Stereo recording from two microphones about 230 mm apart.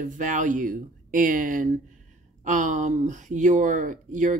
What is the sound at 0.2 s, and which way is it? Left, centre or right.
Speech, right.